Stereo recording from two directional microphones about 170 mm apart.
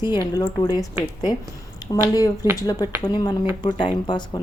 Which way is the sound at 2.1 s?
20° left (ahead or behind).